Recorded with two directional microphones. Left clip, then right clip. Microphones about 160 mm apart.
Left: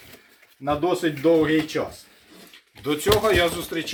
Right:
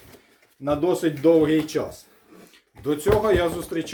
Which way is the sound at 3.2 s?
70° right (ahead or behind).